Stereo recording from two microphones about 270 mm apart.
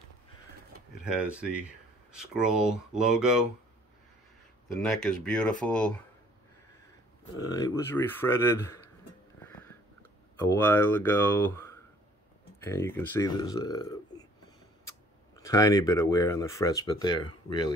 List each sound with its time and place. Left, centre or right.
1.3 s speech: centre
4.7 s speech: centre
7.3 s speech: centre
9.4 s a sound: centre
10.3 s speech: centre
15.3 s speech: centre